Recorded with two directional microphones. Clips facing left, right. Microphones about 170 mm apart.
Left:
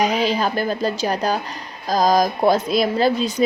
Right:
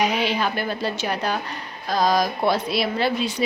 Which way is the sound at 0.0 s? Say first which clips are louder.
Left 3 dB; 40° left (ahead or behind).